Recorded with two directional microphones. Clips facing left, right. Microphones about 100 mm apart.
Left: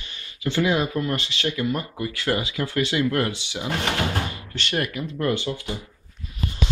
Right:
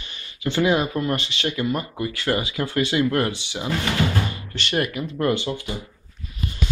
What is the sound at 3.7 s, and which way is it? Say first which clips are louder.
Speech: right 2 dB; 55° left (ahead or behind).